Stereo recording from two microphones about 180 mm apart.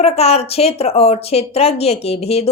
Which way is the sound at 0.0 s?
35° left (ahead or behind).